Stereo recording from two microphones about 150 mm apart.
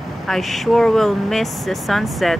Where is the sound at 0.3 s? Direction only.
Centre (ahead or behind).